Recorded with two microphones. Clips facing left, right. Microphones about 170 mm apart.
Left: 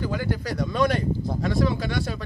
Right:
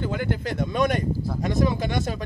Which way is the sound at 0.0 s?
25° right (ahead or behind).